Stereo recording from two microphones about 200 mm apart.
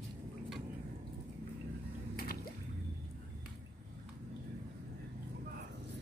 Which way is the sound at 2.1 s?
50° left (ahead or behind).